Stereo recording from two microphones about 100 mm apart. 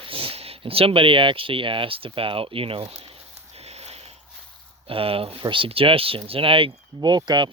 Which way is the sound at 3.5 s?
90° right.